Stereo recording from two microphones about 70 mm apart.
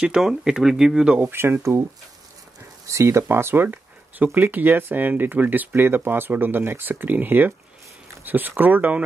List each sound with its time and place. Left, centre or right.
0.2 s speech: centre
1.2 s speech: right
2.9 s speech: right